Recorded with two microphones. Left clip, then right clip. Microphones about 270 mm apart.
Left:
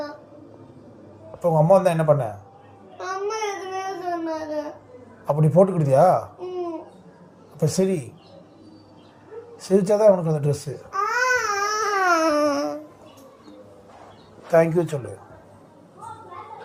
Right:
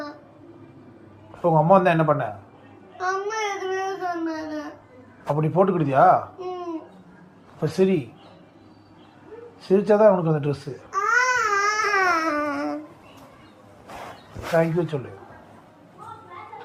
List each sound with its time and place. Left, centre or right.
1.4 s speech: left
3.0 s a sound: centre
5.3 s speech: left
7.6 s speech: left
9.6 s speech: left
10.9 s babbling: centre; by 12.8 s left
14.5 s speech: left